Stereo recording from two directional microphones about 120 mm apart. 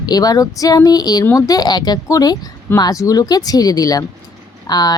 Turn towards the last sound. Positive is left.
turn(degrees=35)  # may be behind; listen again after turning